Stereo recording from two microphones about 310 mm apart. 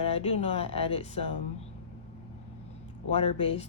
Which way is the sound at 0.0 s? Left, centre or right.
Centre.